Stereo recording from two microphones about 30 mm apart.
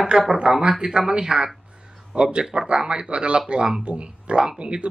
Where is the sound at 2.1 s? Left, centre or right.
Right.